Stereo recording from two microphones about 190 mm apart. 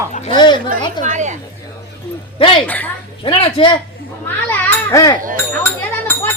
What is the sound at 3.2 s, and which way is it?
Speech, 25° left (ahead or behind).